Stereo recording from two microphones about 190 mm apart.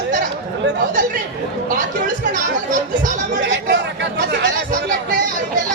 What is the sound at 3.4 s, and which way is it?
Speech, 65° right (ahead or behind).